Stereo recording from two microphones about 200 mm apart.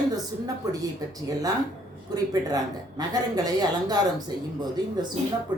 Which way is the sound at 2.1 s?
20° right (ahead or behind).